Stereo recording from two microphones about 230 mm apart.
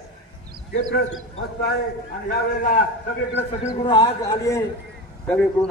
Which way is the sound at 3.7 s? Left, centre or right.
Left.